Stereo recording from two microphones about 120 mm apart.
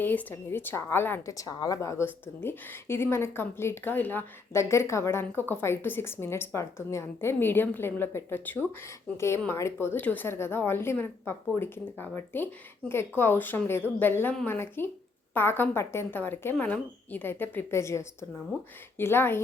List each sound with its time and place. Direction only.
0.0 s a woman's voice: 15° left (ahead or behind)